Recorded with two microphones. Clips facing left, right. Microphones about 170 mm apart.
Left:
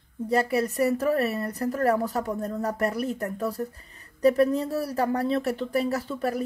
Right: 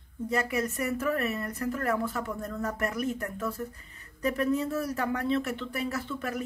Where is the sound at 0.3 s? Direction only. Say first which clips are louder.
Left 6 dB; 35° left (ahead or behind).